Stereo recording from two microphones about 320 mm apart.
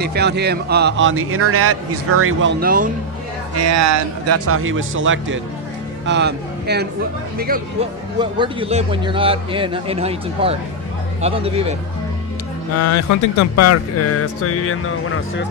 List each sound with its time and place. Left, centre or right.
0.0 s speech: right
2.6 s speech: right
3.5 s a man's voice: right
8.2 s a man's voice: centre
12.7 s speech: left